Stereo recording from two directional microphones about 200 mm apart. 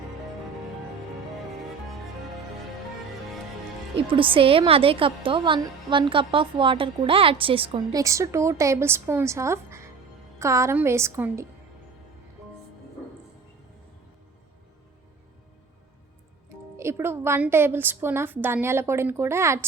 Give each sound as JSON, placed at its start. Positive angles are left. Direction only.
{"t": 4.1, "sound": "a woman's voice", "side_deg": -25}
{"t": 16.7, "sound": "a woman's voice", "side_deg": -10}